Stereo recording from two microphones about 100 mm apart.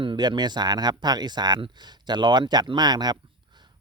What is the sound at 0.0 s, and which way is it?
Speech, 50° right (ahead or behind).